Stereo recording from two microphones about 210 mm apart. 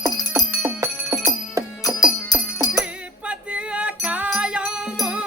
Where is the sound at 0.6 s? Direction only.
15° right (ahead or behind).